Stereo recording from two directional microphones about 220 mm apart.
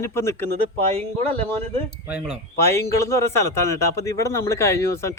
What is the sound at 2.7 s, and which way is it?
Speech, 15° left (ahead or behind).